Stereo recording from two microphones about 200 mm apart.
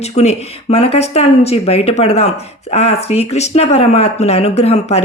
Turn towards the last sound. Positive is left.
turn(degrees=30)  # may be behind; listen again after turning